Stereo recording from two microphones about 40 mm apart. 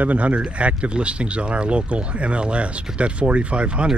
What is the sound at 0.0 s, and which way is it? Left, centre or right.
Speech, right.